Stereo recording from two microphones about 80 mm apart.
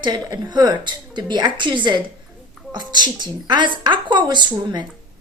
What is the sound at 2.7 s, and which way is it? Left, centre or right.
A woman's voice, right.